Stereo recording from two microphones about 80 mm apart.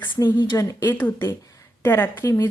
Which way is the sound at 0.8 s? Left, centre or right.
Left.